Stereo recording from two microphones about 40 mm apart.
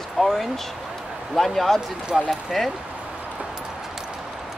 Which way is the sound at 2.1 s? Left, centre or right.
Centre.